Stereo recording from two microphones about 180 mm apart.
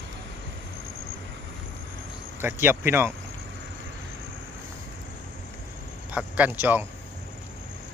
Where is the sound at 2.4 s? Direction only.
10° right (ahead or behind).